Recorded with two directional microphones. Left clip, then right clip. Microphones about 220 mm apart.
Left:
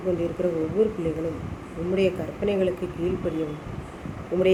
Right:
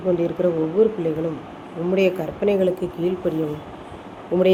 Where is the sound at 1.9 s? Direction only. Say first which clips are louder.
Right 4 dB; 20° right (ahead or behind).